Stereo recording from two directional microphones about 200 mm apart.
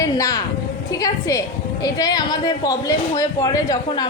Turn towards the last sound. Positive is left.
turn(degrees=20)  # may be behind; listen again after turning